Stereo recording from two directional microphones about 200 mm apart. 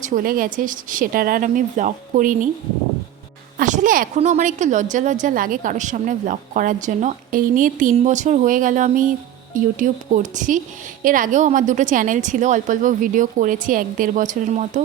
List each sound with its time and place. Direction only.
0.0 s a woman's voice: 45° right (ahead or behind)
3.6 s a woman's voice: 40° right (ahead or behind)